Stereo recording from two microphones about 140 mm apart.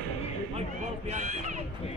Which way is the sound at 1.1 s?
55° right (ahead or behind).